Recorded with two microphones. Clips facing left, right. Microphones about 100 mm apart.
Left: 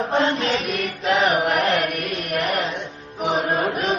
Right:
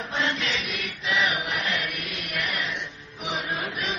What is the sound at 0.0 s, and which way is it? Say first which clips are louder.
Music: left 8 dB; 45° left (ahead or behind).